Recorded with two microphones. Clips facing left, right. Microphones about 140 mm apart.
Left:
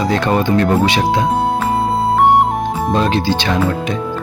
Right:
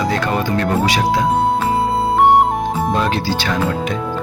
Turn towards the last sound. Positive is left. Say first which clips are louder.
# left 2 dB
turn(degrees=20)  # may be behind; listen again after turning